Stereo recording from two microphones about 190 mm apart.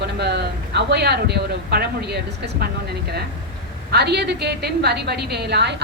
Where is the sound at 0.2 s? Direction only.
60° right (ahead or behind).